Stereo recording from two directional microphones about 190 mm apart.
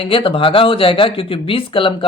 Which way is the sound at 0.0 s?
30° left (ahead or behind).